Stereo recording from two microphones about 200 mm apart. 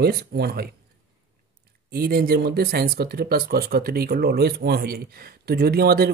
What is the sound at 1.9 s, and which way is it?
Speech, 50° right (ahead or behind).